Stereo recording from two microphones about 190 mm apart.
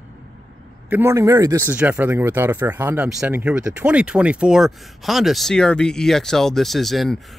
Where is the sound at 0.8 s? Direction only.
10° right (ahead or behind).